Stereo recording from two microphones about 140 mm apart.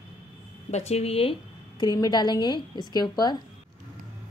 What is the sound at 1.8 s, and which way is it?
A woman's voice, 30° left (ahead or behind).